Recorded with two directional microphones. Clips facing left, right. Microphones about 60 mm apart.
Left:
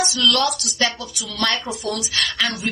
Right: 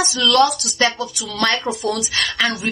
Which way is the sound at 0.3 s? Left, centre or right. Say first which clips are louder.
Right 7 dB; right.